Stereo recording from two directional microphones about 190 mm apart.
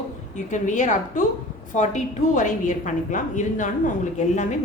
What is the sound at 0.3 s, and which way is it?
A woman's voice, 40° left (ahead or behind).